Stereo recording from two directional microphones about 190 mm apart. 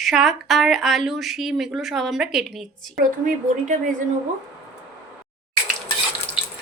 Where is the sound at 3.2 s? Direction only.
40° right (ahead or behind).